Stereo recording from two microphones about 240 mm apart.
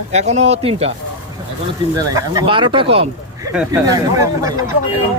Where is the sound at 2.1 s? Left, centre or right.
Centre.